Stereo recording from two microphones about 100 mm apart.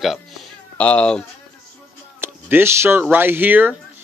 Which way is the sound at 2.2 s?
20° right (ahead or behind).